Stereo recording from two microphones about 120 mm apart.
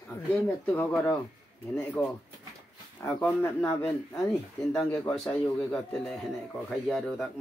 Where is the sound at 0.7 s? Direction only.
15° left (ahead or behind).